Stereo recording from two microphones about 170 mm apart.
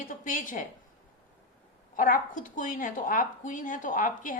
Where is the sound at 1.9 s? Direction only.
55° left (ahead or behind).